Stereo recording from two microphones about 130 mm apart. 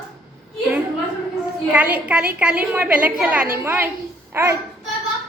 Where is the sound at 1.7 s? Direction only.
10° right (ahead or behind).